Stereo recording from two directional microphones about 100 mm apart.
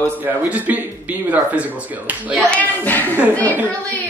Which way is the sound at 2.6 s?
20° left (ahead or behind).